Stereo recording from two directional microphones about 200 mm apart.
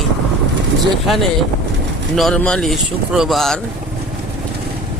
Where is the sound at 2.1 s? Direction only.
Centre (ahead or behind).